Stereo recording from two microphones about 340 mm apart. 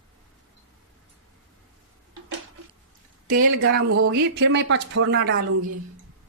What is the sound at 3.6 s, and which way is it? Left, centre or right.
A woman's voice, right.